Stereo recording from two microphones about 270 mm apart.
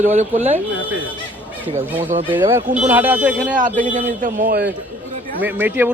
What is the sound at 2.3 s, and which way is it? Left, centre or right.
A man's voice, centre.